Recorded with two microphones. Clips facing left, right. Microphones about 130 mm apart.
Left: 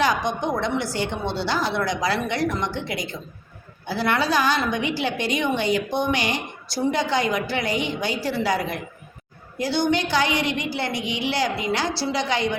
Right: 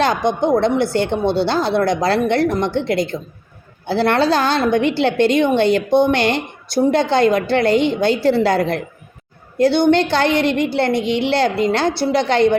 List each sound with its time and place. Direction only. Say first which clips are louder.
0.0 s a woman's voice: right 6 dB; 60° right (ahead or behind)